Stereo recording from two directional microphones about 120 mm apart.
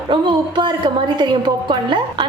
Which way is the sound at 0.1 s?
40° right (ahead or behind).